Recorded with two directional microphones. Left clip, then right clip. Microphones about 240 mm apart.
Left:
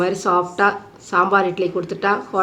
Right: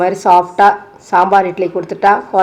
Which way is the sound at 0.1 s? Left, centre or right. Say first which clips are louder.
Right 9 dB; centre.